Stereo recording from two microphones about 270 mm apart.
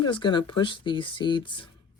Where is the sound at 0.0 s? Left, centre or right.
Centre.